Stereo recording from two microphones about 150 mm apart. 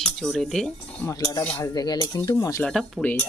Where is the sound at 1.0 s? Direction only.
25° left (ahead or behind).